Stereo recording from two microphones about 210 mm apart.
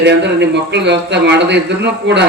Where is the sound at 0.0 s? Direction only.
55° right (ahead or behind).